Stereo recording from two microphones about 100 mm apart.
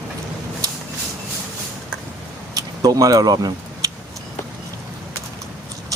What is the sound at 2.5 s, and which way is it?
Vehicle, 35° right (ahead or behind).